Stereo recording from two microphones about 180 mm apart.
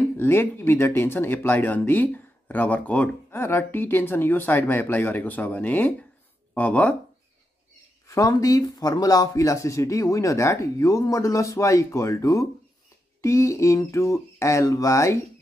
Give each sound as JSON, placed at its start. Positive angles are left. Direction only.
{"t": 0.2, "sound": "speech", "side_deg": 10}
{"t": 8.1, "sound": "speech", "side_deg": 20}